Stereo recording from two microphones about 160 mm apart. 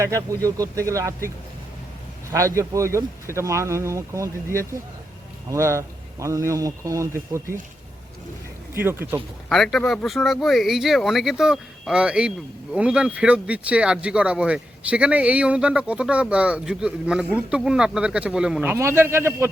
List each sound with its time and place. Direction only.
0.0 s speech: 20° right (ahead or behind)
2.3 s speech: 20° right (ahead or behind)
8.7 s speech: 15° right (ahead or behind)
9.5 s speech: centre (ahead or behind); by 19.5 s 15° right (ahead or behind)